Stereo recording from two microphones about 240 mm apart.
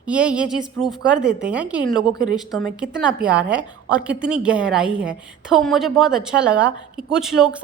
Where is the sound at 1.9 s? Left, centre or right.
Centre.